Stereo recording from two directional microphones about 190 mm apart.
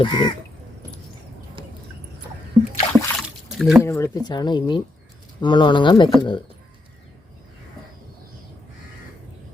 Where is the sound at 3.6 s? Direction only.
Centre (ahead or behind).